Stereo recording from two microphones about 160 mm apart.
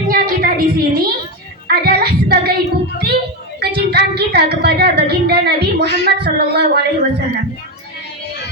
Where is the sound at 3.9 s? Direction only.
90° right.